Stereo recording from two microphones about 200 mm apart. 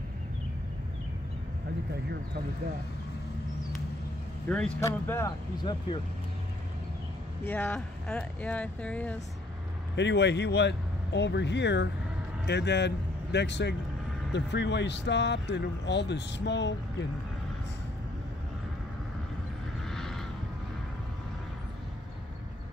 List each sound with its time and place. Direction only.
4.5 s speech: 5° left (ahead or behind); by 5.9 s 20° left (ahead or behind)
7.4 s speech: 5° left (ahead or behind)
9.9 s speech: 60° left (ahead or behind)
19.9 s a sound: centre (ahead or behind)